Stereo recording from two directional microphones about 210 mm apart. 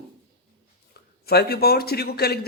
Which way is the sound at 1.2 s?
45° left (ahead or behind).